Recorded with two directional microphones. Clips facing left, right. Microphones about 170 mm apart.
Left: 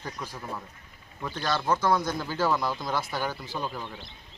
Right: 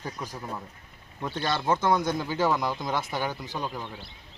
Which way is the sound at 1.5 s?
20° right (ahead or behind).